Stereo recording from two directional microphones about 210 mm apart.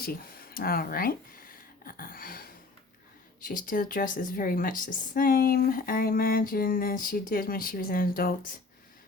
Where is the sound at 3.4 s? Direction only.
40° left (ahead or behind).